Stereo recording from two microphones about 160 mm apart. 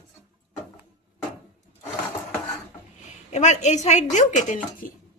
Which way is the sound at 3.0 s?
50° left (ahead or behind).